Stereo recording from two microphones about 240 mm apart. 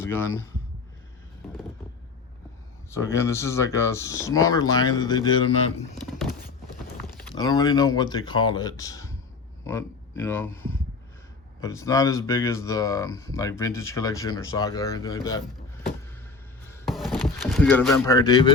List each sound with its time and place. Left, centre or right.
0.0 s a man's voice: centre
2.9 s speech: centre
7.3 s speech: centre
16.8 s a sound: centre